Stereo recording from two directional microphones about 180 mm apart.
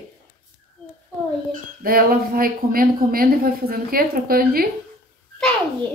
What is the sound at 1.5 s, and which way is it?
Speech, 55° right (ahead or behind).